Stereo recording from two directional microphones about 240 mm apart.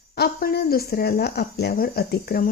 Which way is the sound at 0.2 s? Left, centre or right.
Left.